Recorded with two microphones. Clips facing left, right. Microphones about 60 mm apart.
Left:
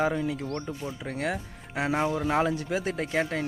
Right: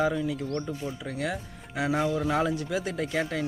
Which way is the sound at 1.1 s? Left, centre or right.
Left.